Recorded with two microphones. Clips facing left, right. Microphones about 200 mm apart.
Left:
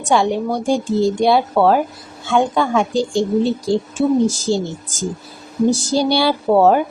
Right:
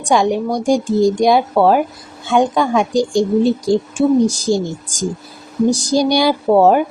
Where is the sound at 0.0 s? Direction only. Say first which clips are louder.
Right 2 dB; 15° right (ahead or behind).